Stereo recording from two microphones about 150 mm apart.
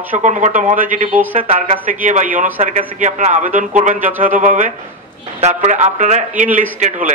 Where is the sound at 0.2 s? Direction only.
55° right (ahead or behind).